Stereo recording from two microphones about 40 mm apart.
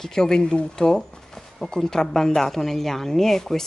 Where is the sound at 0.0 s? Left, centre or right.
Centre.